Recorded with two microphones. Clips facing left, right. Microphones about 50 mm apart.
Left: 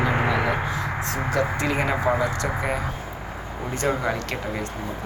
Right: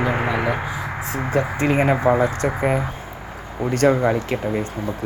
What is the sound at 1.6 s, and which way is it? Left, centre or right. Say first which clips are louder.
Speech: right 5 dB; right.